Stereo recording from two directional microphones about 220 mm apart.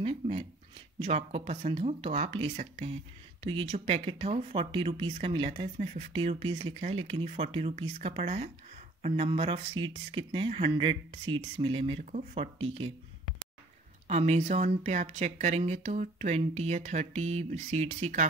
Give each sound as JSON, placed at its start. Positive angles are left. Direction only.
{"t": 0.0, "sound": "speech", "side_deg": -25}
{"t": 14.0, "sound": "speech", "side_deg": -30}